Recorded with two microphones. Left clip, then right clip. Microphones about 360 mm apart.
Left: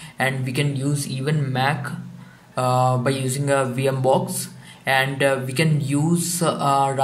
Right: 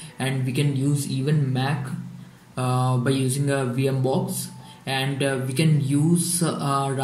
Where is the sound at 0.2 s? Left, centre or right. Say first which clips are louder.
Left 4 dB; centre.